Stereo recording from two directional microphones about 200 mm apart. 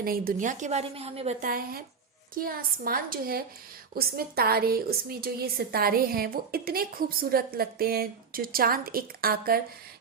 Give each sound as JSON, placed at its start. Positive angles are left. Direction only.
{"t": 0.0, "sound": "a woman's voice", "side_deg": -45}